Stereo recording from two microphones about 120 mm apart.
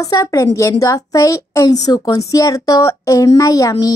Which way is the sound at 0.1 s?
25° left (ahead or behind).